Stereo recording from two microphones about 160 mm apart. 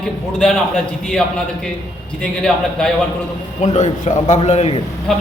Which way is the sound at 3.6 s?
45° left (ahead or behind).